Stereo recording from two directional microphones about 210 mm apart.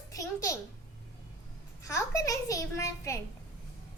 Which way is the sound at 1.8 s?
15° left (ahead or behind).